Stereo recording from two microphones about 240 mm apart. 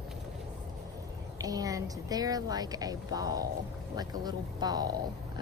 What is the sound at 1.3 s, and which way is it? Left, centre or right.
Speech, centre.